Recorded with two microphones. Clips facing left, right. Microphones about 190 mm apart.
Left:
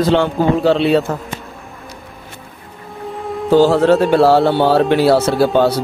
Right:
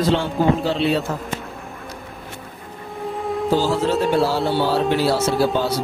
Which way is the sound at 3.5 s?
60° left (ahead or behind).